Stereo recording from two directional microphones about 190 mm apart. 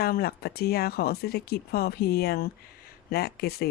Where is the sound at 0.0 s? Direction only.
55° left (ahead or behind).